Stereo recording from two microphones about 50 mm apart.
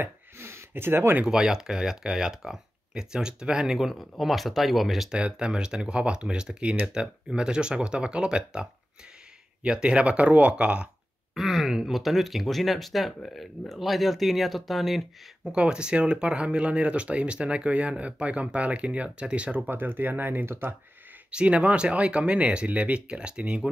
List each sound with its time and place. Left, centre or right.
0.0 s a sound: right
1.2 s speech: centre
5.1 s speech: centre
11.3 s a sound: centre
11.9 s speech: centre
15.5 s speech: right
19.7 s speech: right
21.3 s speech: right